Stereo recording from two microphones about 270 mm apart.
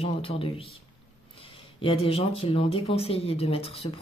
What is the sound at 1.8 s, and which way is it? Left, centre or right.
Speech, left.